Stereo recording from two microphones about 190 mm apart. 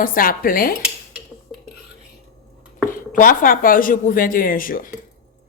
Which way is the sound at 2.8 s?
45° left (ahead or behind).